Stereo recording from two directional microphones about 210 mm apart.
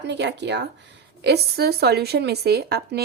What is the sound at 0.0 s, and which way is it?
A woman's voice, 55° right (ahead or behind).